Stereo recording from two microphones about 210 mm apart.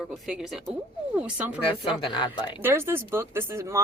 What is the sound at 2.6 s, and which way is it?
Speech, 10° right (ahead or behind).